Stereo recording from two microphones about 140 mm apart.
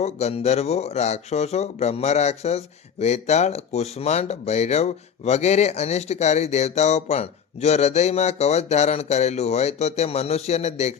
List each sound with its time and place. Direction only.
0.0 s speech: 50° left (ahead or behind)